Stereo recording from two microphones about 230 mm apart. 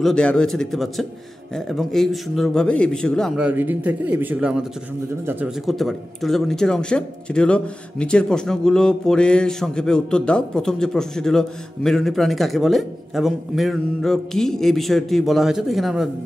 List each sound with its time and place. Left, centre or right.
0.0 s a man's voice: centre